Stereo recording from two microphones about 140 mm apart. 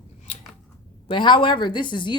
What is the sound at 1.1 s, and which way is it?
Speech, 35° left (ahead or behind).